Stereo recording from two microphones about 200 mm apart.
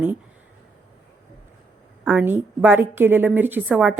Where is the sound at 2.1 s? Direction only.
10° right (ahead or behind).